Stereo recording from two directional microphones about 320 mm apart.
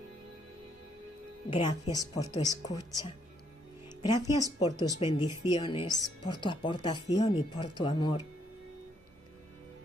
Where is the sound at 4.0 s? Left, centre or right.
Centre.